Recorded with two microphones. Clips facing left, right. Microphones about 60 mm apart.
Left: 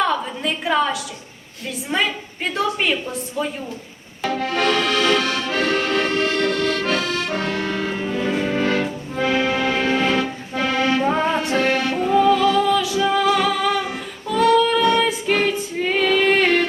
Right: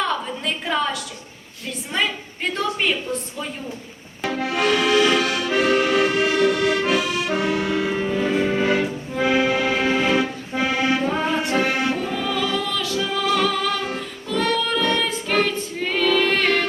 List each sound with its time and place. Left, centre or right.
0.0 s a sound: centre
1.9 s a woman's voice: centre
4.2 s accordion: centre
11.5 s music: centre
12.1 s music: left
12.6 s music: centre